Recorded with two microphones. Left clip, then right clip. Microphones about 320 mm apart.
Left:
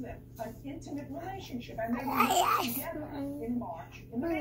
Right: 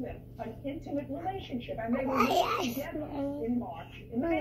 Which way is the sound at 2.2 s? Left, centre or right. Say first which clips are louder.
Left 3 dB; centre.